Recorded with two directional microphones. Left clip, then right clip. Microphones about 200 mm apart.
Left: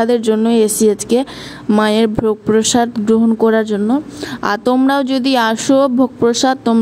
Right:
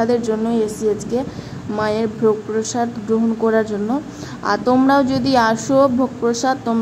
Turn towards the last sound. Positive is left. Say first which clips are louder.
# left 5 dB
turn(degrees=35)  # may be behind; listen again after turning